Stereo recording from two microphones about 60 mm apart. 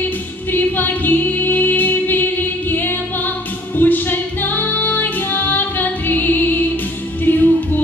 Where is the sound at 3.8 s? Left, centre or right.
Left.